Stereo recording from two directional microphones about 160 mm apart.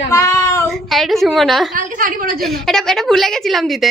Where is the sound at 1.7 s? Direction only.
60° right (ahead or behind).